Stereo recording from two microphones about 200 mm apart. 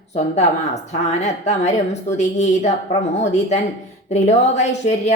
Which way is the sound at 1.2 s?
35° left (ahead or behind).